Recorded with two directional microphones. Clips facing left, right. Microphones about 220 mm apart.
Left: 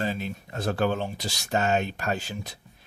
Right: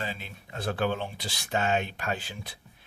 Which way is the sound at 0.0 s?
45° left (ahead or behind).